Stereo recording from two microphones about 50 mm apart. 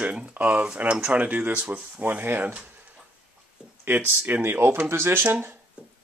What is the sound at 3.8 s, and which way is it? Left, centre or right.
Speech, right.